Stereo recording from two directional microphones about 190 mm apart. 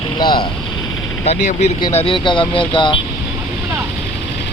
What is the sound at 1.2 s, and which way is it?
Speech, 35° left (ahead or behind).